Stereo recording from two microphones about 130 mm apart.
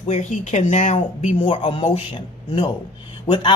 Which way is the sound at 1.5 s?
45° left (ahead or behind).